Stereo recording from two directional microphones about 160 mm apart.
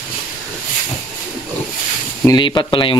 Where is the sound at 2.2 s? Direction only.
25° left (ahead or behind).